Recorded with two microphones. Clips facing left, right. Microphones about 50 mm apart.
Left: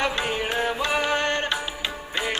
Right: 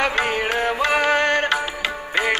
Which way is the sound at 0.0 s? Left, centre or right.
Right.